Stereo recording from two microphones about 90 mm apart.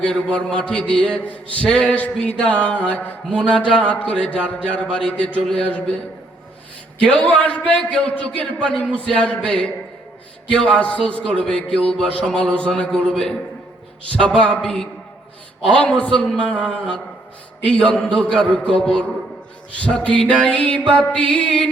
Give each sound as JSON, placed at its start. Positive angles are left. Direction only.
{"t": 0.0, "sound": "a man's voice", "side_deg": 10}
{"t": 7.0, "sound": "a man's voice", "side_deg": 15}
{"t": 20.3, "sound": "a man's voice", "side_deg": 10}